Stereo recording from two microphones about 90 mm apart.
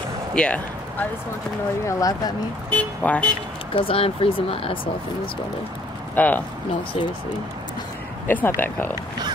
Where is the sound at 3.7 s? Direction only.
90° left.